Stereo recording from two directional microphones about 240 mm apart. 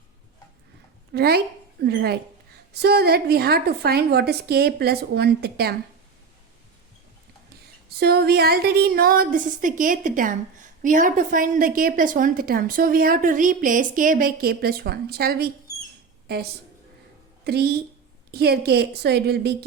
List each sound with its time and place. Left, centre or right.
1.1 s a woman's voice: right
7.9 s a woman's voice: right